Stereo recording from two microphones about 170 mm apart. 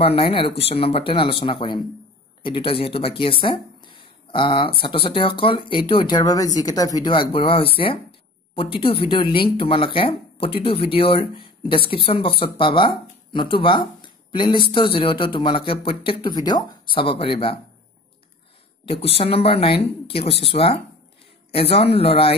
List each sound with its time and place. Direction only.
0.0 s speech: 35° left (ahead or behind)
18.9 s speech: 35° left (ahead or behind)